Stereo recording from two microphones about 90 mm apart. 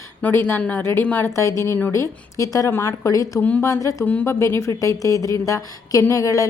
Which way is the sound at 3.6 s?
35° left (ahead or behind).